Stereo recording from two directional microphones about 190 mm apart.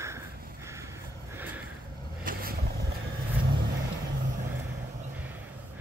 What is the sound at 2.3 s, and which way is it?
Vehicle, 50° right (ahead or behind).